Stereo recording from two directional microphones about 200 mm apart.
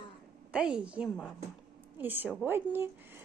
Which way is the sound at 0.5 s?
5° right (ahead or behind).